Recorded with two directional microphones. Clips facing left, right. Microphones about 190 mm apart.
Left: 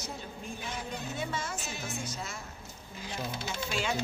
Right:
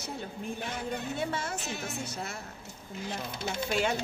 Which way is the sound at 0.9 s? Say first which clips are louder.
Right 4 dB; 60° right (ahead or behind).